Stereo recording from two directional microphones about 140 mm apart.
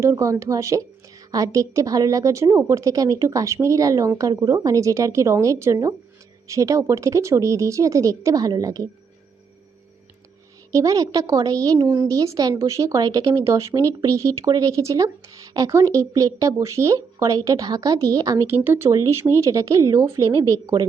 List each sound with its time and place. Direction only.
0.0 s speech: 20° right (ahead or behind)
10.7 s speech: 25° right (ahead or behind)